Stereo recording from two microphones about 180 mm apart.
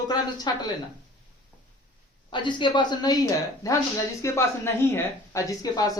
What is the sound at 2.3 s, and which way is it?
A woman's voice, 25° left (ahead or behind).